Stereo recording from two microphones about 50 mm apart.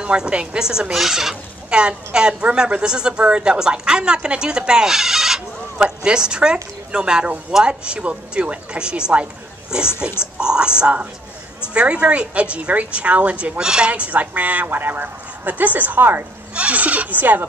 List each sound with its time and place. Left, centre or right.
0.0 s a woman's voice: centre
1.7 s a woman's voice: centre; by 16.3 s right
16.5 s speech: right